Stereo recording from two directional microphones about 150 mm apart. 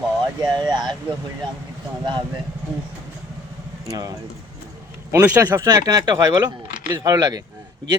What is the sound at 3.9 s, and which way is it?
A man's voice, 25° right (ahead or behind).